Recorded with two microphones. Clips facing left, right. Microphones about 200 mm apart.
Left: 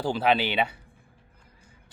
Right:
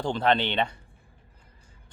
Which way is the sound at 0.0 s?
5° left (ahead or behind).